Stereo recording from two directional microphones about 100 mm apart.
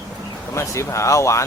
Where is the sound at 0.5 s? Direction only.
30° left (ahead or behind).